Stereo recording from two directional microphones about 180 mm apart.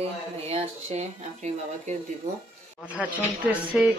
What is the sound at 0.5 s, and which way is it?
Speech, 35° right (ahead or behind).